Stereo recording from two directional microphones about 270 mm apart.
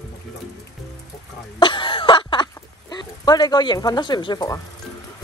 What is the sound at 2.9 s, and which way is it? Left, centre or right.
Speech, centre.